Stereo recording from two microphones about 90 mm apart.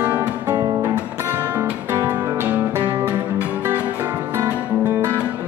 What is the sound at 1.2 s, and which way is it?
Music, 25° right (ahead or behind).